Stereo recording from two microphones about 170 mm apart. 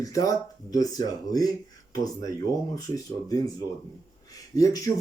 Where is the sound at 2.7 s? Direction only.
20° left (ahead or behind).